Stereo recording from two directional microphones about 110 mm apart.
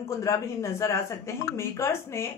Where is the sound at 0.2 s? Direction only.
30° left (ahead or behind).